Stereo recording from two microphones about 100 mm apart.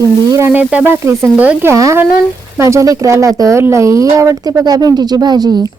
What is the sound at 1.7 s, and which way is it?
A woman's voice, 30° right (ahead or behind).